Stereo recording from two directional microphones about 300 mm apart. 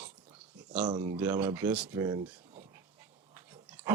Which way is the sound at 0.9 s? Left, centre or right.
Centre.